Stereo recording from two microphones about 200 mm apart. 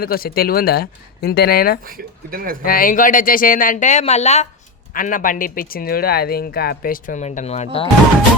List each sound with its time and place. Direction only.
0.0 s speech: 50° left (ahead or behind)
1.8 s speech: 45° right (ahead or behind)
2.6 s speech: 45° left (ahead or behind)